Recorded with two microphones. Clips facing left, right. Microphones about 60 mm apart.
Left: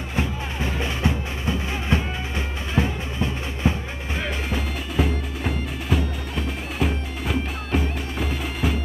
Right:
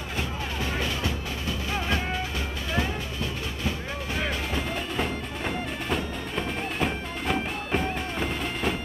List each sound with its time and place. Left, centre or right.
0.7 s music: left
4.2 s music: centre